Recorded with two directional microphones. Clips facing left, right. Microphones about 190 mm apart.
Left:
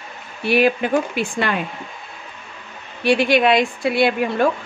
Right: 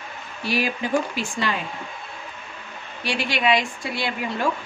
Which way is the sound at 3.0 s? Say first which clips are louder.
Left 8 dB; 55° left (ahead or behind).